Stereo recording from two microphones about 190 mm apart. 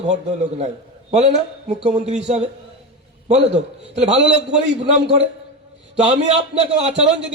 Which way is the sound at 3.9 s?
30° right (ahead or behind).